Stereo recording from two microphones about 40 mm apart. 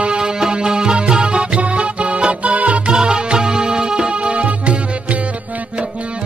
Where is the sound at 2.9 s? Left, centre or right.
Right.